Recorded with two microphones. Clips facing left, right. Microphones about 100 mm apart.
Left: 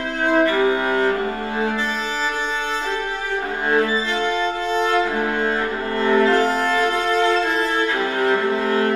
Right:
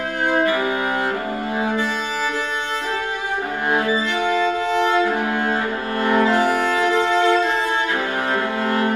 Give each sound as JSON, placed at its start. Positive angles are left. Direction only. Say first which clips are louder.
{"t": 0.3, "sound": "cello", "louder": "left 3 dB", "side_deg": -15}
{"t": 4.3, "sound": "music", "louder": "right 2 dB", "side_deg": 20}
{"t": 4.8, "sound": "music", "louder": "right 1 dB", "side_deg": -15}